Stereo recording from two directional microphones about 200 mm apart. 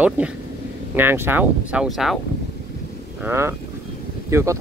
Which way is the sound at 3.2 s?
10° right (ahead or behind).